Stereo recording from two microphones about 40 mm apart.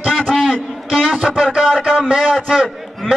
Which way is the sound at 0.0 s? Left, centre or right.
Centre.